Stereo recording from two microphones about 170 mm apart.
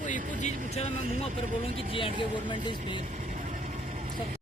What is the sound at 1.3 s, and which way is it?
Speech, 50° right (ahead or behind).